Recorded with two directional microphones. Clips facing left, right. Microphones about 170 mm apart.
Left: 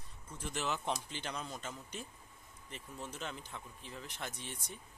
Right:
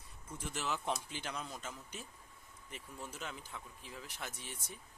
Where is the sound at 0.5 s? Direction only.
Centre (ahead or behind).